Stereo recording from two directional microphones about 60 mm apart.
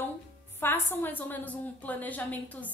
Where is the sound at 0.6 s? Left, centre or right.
Left.